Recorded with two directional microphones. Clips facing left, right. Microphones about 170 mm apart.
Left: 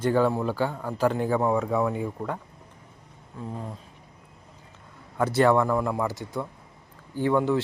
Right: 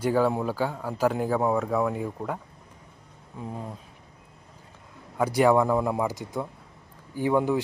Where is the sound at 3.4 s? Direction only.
15° right (ahead or behind).